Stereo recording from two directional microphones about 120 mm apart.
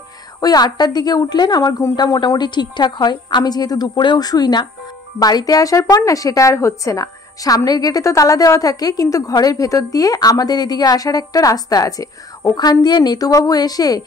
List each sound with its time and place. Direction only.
0.4 s a woman's voice: 35° left (ahead or behind)